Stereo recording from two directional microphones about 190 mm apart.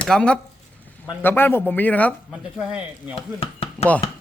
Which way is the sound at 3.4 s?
30° left (ahead or behind).